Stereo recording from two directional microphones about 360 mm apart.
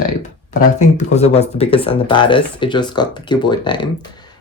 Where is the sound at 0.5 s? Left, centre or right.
Centre.